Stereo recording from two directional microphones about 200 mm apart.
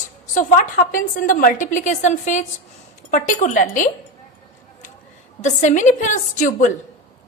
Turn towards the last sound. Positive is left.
turn(degrees=40)  # may be behind; listen again after turning